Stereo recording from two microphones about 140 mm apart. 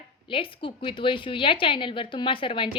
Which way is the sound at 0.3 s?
40° left (ahead or behind).